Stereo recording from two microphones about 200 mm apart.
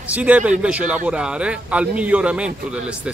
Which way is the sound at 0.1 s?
5° right (ahead or behind).